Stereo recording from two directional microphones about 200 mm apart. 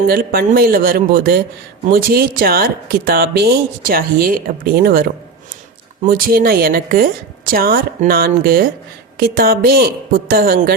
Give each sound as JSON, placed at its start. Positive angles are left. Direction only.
{"t": 0.1, "sound": "speech", "side_deg": -50}